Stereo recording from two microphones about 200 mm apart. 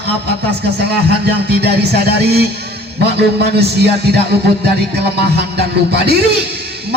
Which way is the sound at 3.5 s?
55° right (ahead or behind).